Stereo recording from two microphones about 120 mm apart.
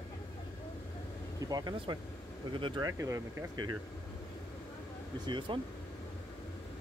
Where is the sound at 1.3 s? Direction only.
30° right (ahead or behind).